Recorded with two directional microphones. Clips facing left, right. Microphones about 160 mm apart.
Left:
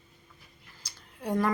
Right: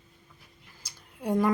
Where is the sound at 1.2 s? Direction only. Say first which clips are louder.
Right 3 dB; 10° right (ahead or behind).